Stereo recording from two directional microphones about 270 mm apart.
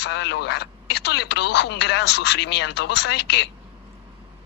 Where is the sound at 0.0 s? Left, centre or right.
Left.